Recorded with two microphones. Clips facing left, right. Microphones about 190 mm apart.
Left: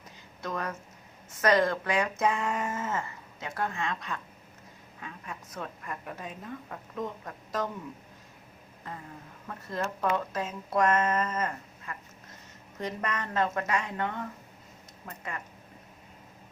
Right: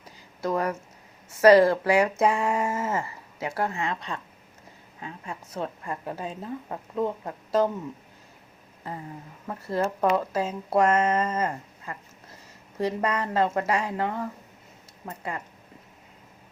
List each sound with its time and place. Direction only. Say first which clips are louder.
0.4 s a sound: right 8 dB; 30° right (ahead or behind)
1.4 s speech: right 9 dB; 30° right (ahead or behind)
9.6 s speech: right 6 dB; 30° right (ahead or behind)